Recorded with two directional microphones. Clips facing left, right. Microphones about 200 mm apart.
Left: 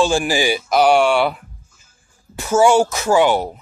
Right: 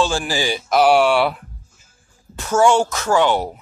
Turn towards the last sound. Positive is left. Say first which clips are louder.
# left 2 dB
turn(degrees=10)  # may be behind; listen again after turning